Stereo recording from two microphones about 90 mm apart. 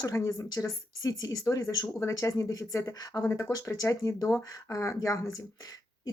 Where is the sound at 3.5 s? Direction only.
40° left (ahead or behind).